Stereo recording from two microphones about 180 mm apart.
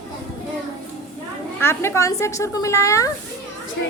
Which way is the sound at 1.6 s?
15° left (ahead or behind).